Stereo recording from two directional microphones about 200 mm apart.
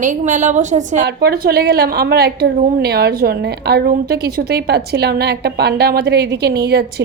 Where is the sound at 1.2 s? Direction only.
50° right (ahead or behind).